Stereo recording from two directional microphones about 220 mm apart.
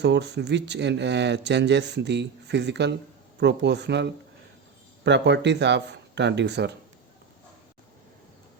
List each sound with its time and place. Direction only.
0.0 s speech: 50° right (ahead or behind)